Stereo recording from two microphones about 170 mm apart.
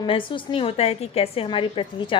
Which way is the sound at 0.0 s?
30° left (ahead or behind).